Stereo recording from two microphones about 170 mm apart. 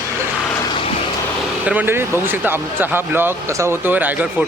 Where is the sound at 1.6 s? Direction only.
10° right (ahead or behind).